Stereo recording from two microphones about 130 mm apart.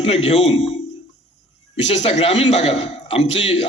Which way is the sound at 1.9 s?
60° left (ahead or behind).